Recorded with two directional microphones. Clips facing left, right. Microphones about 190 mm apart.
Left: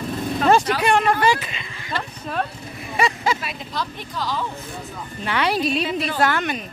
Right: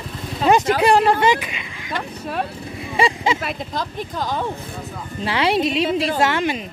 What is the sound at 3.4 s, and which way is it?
Speech, 50° right (ahead or behind).